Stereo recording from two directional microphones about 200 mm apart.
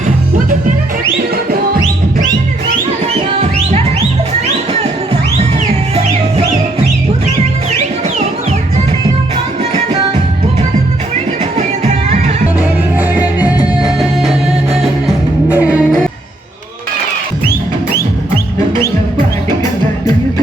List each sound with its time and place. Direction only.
3.3 s music: 30° right (ahead or behind)
11.5 s music: 30° right (ahead or behind)
12.5 s music: 10° right (ahead or behind)